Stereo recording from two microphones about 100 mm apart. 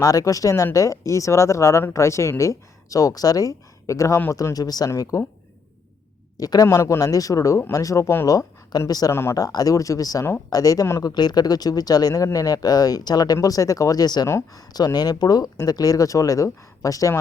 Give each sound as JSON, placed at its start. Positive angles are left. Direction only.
{"t": 0.0, "sound": "speech", "side_deg": 35}
{"t": 6.3, "sound": "speech", "side_deg": 35}
{"t": 14.3, "sound": "speech", "side_deg": 30}
{"t": 14.7, "sound": "speech", "side_deg": 40}